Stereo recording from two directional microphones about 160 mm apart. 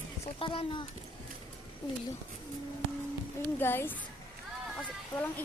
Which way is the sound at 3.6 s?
15° left (ahead or behind).